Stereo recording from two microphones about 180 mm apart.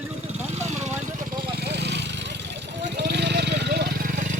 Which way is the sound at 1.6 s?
70° right (ahead or behind).